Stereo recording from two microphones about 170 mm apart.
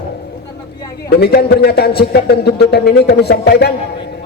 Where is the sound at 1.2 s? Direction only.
70° left (ahead or behind).